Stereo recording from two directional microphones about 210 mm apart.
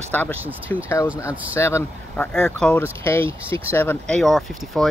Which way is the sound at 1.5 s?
10° left (ahead or behind).